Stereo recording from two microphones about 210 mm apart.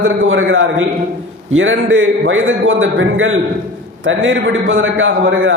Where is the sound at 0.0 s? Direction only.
70° right (ahead or behind).